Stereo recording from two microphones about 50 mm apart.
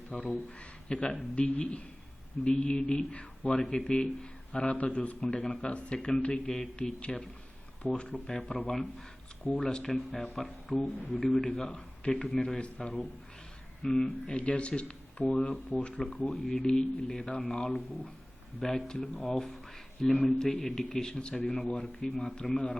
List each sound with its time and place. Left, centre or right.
0.1 s speech: centre
3.6 s speech: centre
9.4 s speech: left
9.6 s speech: centre
11.7 s a man's voice: left
16.2 s speech: centre
22.5 s speech: centre